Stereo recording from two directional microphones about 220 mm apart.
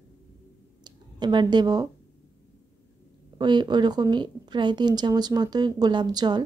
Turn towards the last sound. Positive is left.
turn(degrees=-20)  # may be behind; listen again after turning